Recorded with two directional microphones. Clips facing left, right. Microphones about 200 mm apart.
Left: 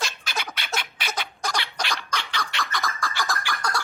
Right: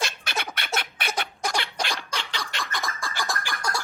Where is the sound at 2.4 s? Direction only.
25° right (ahead or behind).